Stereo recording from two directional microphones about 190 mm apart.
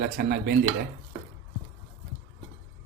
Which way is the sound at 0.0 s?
50° right (ahead or behind).